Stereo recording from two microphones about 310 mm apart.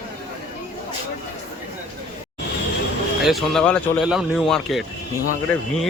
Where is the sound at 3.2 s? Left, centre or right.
Centre.